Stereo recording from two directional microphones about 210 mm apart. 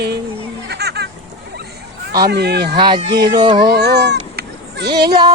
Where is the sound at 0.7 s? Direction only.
50° right (ahead or behind).